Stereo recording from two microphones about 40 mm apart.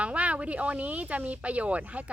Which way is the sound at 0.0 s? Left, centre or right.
Right.